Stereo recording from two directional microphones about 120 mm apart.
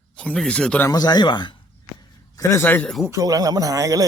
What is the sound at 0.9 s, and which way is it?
Speech, 35° left (ahead or behind).